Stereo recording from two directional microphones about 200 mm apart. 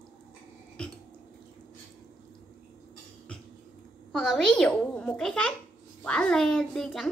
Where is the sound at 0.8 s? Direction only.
5° left (ahead or behind).